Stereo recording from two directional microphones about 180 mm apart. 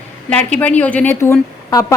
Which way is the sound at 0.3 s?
5° left (ahead or behind).